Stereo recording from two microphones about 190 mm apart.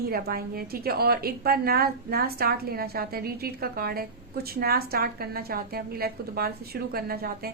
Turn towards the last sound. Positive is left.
turn(degrees=-55)  # may be behind; listen again after turning